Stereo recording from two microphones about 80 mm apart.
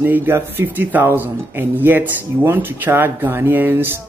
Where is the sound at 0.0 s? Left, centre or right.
Right.